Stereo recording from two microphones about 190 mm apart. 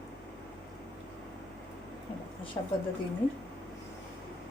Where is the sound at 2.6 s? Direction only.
25° left (ahead or behind).